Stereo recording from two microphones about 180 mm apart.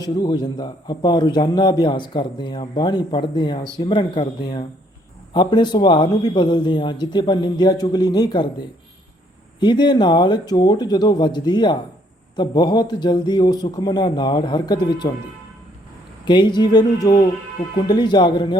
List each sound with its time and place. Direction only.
0.0 s a man's voice: 20° left (ahead or behind)
9.6 s a man's voice: 25° left (ahead or behind)
16.2 s a man's voice: 25° left (ahead or behind)